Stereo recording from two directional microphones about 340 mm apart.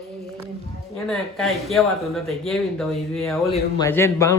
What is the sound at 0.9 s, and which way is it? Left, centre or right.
A man's voice, centre.